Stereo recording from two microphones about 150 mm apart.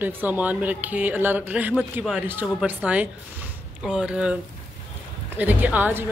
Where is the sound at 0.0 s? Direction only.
10° right (ahead or behind).